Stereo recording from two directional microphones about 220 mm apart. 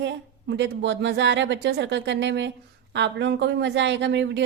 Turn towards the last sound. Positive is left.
turn(degrees=-50)  # may be behind; listen again after turning